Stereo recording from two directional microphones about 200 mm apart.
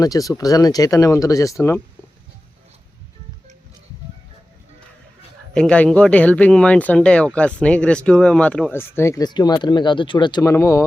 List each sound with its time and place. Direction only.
0.0 s speech: 15° left (ahead or behind)
5.5 s speech: 5° left (ahead or behind)